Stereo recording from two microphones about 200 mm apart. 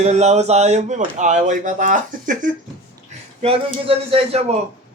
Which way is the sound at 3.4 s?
30° right (ahead or behind).